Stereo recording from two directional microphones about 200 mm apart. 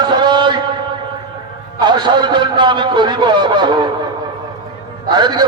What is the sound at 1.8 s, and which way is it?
A man's voice, 20° right (ahead or behind).